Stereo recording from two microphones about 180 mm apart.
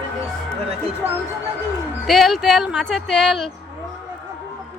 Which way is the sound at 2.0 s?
Centre (ahead or behind).